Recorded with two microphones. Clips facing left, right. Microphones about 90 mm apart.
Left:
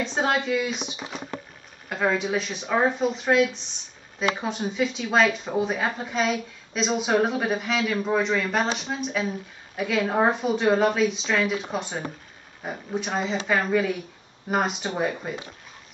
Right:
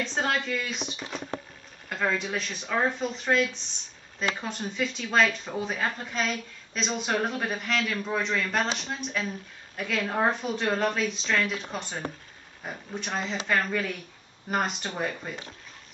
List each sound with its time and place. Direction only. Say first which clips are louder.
0.0 s a woman's voice: left 4 dB; 5° left (ahead or behind)